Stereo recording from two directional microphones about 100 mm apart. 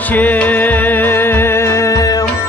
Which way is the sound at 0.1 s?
15° left (ahead or behind).